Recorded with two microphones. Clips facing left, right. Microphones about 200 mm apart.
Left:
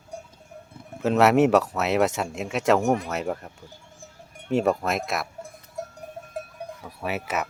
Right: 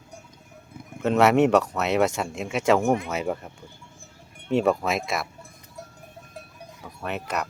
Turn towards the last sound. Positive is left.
turn(degrees=5)  # may be behind; listen again after turning